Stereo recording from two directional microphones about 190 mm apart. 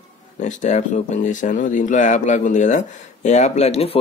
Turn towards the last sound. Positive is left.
turn(degrees=35)  # may be behind; listen again after turning